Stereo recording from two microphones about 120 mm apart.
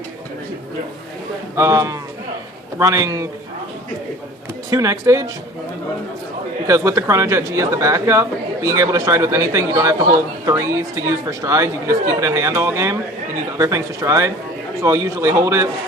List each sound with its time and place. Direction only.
1.5 s speech: 25° right (ahead or behind)
4.7 s speech: 25° right (ahead or behind)
6.7 s speech: 25° right (ahead or behind)